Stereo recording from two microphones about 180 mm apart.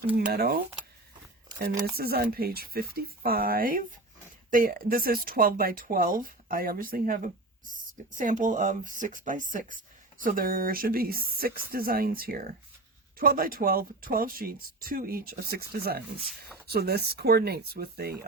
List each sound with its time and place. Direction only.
0.3 s speech: 60° right (ahead or behind)
1.8 s speech: 60° right (ahead or behind)